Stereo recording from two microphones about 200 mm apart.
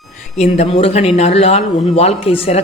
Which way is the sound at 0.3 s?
30° left (ahead or behind).